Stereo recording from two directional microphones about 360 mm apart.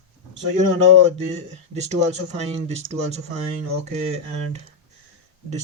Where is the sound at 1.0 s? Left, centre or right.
Centre.